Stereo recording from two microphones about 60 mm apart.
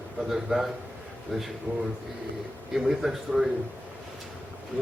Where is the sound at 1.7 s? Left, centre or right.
Left.